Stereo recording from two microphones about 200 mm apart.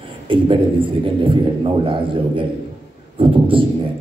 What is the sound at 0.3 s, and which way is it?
A man's voice, 25° right (ahead or behind).